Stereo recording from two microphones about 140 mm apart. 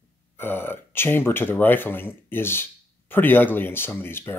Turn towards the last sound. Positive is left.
turn(degrees=15)  # may be behind; listen again after turning